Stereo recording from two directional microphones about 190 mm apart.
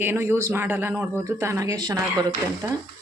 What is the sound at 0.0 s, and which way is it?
Speech, 10° right (ahead or behind).